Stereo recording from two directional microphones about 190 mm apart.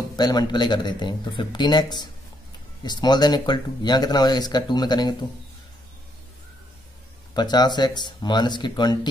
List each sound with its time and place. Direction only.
0.1 s speech: 20° left (ahead or behind)
7.3 s speech: 20° left (ahead or behind)